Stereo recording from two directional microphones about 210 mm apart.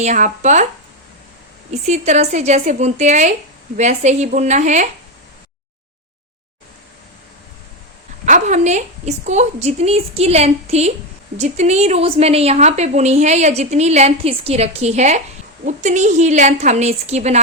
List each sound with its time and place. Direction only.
0.0 s a woman's voice: 35° right (ahead or behind)
1.9 s a woman's voice: 35° right (ahead or behind)
8.2 s a woman's voice: 35° right (ahead or behind)